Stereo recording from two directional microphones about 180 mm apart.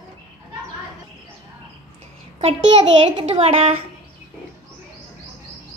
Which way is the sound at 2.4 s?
35° right (ahead or behind).